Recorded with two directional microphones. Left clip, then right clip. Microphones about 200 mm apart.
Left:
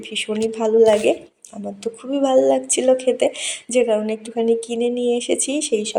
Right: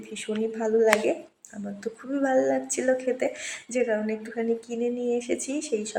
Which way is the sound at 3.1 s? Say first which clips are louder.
Left 9 dB; 25° left (ahead or behind).